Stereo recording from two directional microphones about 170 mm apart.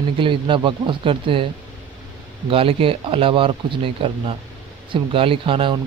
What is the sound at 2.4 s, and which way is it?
Speech, 35° right (ahead or behind).